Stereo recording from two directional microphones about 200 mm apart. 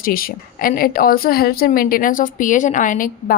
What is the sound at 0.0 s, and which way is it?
A woman's voice, 45° left (ahead or behind).